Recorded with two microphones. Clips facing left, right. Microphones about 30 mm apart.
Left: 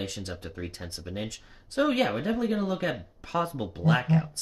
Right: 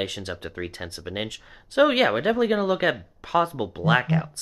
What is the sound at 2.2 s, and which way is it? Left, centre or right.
Speech, right.